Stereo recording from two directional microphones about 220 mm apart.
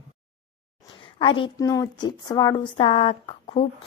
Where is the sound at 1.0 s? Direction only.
25° left (ahead or behind).